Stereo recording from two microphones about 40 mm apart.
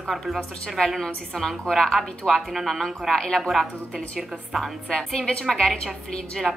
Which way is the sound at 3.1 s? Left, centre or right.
Centre.